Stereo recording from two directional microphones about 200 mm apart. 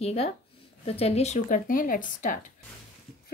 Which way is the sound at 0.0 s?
30° left (ahead or behind).